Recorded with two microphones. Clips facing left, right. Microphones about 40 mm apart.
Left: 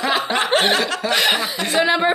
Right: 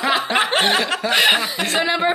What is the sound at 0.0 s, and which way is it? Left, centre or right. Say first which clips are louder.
Chuckle: right 1 dB; centre.